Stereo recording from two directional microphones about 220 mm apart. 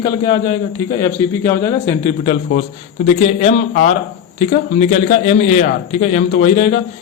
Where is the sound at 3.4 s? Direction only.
35° left (ahead or behind).